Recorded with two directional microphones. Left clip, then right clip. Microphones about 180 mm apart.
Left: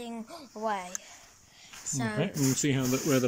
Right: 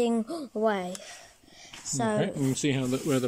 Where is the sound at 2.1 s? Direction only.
5° left (ahead or behind).